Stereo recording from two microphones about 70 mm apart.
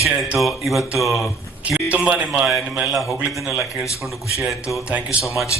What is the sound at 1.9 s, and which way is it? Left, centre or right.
Speech, centre.